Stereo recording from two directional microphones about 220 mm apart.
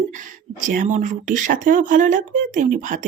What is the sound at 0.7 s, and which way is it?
Speech, 35° right (ahead or behind).